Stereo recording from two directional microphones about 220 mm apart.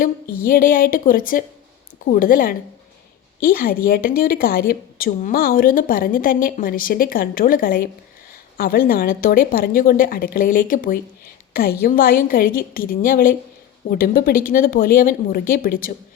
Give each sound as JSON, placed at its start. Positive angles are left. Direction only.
{"t": 0.0, "sound": "a woman's voice", "side_deg": 40}